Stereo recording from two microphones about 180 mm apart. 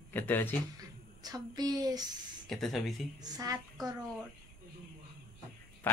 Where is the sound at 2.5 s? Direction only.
Centre (ahead or behind).